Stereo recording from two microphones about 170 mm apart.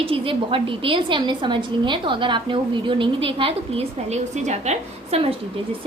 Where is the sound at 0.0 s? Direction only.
30° right (ahead or behind).